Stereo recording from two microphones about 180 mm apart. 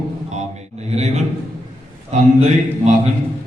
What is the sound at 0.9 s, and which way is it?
Speech, 40° right (ahead or behind).